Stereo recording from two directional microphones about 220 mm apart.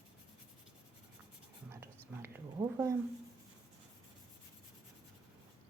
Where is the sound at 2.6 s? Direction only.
15° right (ahead or behind).